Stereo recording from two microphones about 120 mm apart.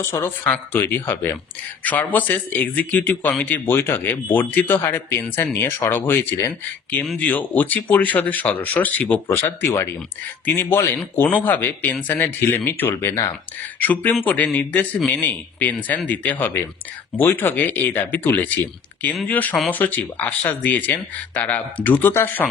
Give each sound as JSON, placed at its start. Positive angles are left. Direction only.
{"t": 0.0, "sound": "speech", "side_deg": 20}